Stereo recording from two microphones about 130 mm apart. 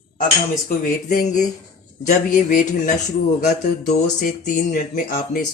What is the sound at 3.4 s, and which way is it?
Speech, 80° left.